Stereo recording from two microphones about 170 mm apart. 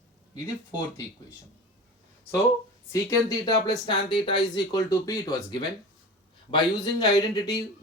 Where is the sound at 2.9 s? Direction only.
20° left (ahead or behind).